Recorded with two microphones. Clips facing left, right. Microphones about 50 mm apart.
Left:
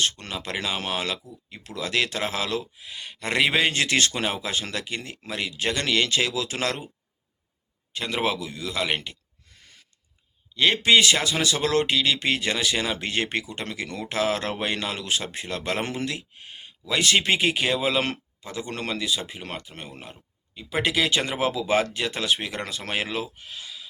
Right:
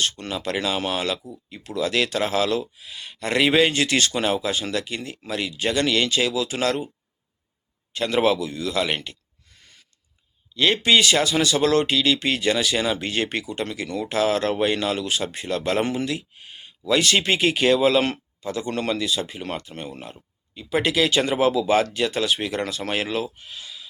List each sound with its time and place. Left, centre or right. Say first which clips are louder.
0.0 s speech: right 1 dB; left
0.3 s speech: right 4 dB; centre
4.1 s speech: right 5 dB; left
4.4 s speech: right 4 dB; left
7.9 s speech: right 6 dB; centre
10.5 s speech: right 1 dB; left
17.0 s speech: left 1 dB; left
18.0 s speech: right 4 dB; left